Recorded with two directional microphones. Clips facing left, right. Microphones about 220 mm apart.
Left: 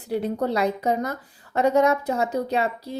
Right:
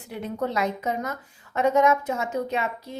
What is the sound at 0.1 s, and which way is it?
Speech, 35° left (ahead or behind).